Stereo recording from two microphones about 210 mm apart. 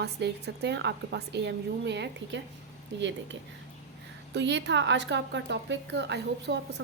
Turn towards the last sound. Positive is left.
turn(degrees=-55)  # may be behind; listen again after turning